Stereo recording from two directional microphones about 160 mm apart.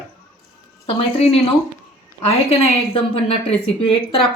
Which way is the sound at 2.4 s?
35° left (ahead or behind).